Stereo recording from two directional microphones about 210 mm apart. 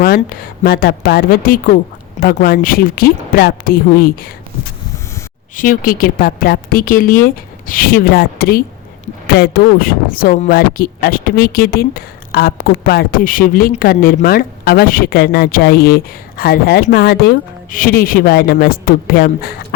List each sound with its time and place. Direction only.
0.0 s a woman's voice: 45° left (ahead or behind)
5.5 s a woman's voice: 40° left (ahead or behind)